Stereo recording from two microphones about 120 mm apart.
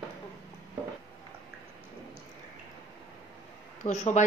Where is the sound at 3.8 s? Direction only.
75° left (ahead or behind).